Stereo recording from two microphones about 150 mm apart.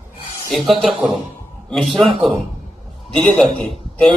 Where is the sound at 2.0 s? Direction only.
35° right (ahead or behind).